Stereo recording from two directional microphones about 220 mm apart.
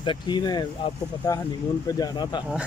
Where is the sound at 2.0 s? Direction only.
20° left (ahead or behind).